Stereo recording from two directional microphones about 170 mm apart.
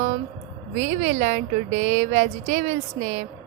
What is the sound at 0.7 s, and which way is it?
A woman's voice, 45° right (ahead or behind).